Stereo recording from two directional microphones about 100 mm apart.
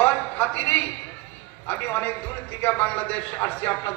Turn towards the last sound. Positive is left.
turn(degrees=15)  # may be behind; listen again after turning